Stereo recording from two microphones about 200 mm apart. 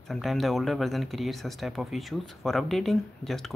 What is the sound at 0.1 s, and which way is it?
Speech, centre (ahead or behind).